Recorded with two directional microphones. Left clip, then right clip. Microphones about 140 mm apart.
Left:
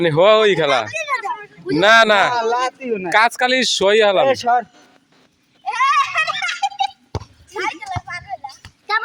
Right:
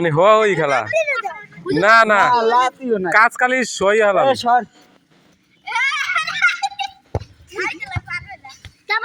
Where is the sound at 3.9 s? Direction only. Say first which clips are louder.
Even; 60° left (ahead or behind).